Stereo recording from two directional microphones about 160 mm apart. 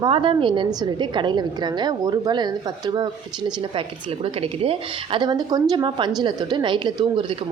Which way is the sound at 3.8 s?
35° right (ahead or behind).